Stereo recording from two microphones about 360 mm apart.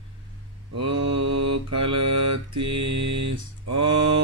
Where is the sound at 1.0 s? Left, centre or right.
Right.